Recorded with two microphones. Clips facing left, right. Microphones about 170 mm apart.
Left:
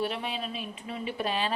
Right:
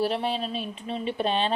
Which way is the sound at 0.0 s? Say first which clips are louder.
Right 6 dB; 35° right (ahead or behind).